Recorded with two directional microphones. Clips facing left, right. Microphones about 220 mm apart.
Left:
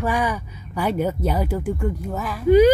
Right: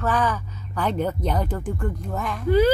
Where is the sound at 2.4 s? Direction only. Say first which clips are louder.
Left 5 dB; 15° left (ahead or behind).